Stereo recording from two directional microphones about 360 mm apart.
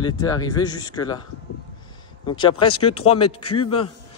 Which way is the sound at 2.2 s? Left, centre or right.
Centre.